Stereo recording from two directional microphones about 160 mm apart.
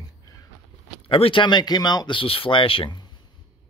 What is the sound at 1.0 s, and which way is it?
Speech, 35° left (ahead or behind).